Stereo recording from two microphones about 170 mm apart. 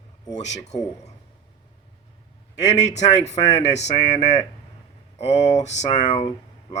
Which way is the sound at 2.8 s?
40° left (ahead or behind).